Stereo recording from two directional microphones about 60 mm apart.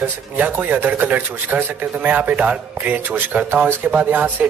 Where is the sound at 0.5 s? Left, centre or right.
Right.